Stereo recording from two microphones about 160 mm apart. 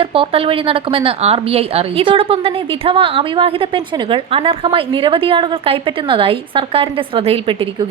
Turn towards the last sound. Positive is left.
turn(degrees=-35)  # may be behind; listen again after turning